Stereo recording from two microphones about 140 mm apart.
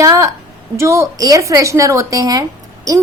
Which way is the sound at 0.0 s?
20° right (ahead or behind).